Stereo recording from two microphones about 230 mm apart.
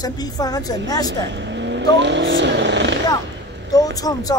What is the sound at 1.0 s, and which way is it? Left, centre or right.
Speech, right.